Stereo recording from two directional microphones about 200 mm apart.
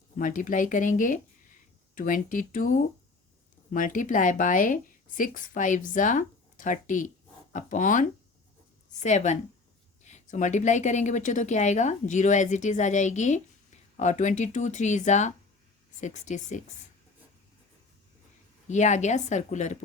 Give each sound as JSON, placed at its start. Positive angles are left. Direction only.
{"t": 0.2, "sound": "speech", "side_deg": 45}
{"t": 18.7, "sound": "speech", "side_deg": 35}